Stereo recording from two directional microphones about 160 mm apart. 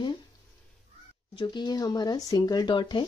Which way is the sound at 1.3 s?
30° left (ahead or behind).